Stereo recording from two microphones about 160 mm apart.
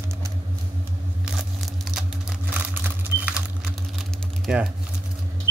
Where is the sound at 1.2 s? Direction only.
Centre (ahead or behind).